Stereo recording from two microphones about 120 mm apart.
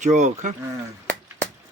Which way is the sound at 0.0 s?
90° right.